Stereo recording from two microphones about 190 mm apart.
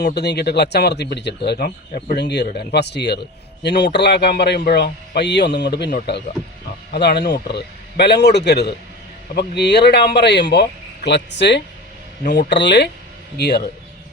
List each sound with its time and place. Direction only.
0.0 s a man's voice: 60° left (ahead or behind)